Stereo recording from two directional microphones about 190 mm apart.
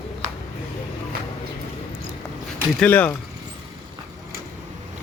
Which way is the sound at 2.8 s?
10° left (ahead or behind).